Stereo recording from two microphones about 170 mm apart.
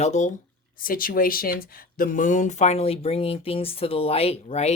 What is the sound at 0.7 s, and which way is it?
Speech, 55° left (ahead or behind).